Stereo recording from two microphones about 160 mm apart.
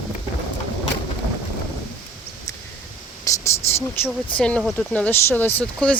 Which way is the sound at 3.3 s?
20° left (ahead or behind).